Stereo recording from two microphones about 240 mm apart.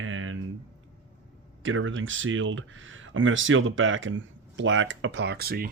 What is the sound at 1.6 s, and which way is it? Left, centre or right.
Speech, right.